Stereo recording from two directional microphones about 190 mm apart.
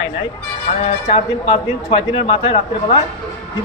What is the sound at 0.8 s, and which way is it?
A man's voice, 30° left (ahead or behind).